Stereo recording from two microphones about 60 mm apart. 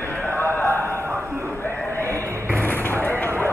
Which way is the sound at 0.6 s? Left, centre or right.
Left.